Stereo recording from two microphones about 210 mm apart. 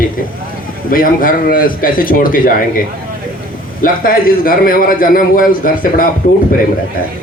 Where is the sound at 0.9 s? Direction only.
40° left (ahead or behind).